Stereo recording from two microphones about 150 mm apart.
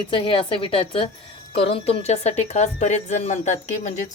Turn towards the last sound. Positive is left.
turn(degrees=55)  # may be behind; listen again after turning